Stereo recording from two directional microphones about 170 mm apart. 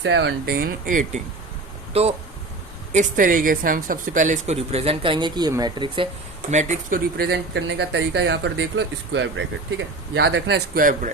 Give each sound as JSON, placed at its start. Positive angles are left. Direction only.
{"t": 0.0, "sound": "speech", "side_deg": -90}
{"t": 1.9, "sound": "speech", "side_deg": -35}
{"t": 2.9, "sound": "speech", "side_deg": -50}
{"t": 6.5, "sound": "speech", "side_deg": -45}
{"t": 7.2, "sound": "speech", "side_deg": -80}
{"t": 10.8, "sound": "speech", "side_deg": -55}